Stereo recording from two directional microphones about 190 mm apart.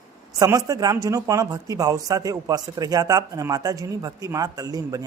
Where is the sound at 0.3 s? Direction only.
20° right (ahead or behind).